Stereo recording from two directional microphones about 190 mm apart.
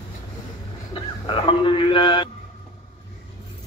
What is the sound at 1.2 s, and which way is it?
A man's voice, 30° left (ahead or behind).